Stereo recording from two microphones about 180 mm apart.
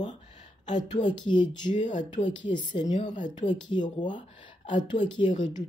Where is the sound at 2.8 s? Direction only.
40° left (ahead or behind).